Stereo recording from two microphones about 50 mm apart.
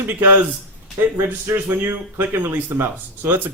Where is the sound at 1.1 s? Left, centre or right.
Right.